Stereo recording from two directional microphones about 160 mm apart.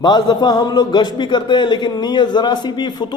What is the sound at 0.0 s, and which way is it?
A man's voice, 25° left (ahead or behind).